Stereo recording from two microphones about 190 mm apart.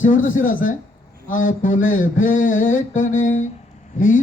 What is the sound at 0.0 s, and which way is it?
Mantra, 45° left (ahead or behind).